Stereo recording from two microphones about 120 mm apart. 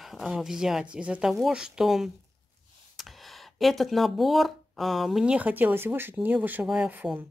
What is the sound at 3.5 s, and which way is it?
Speech, centre (ahead or behind).